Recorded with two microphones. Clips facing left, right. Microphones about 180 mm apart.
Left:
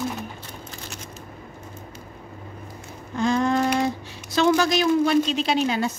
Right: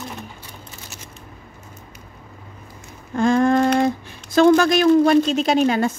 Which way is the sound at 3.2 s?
55° right (ahead or behind).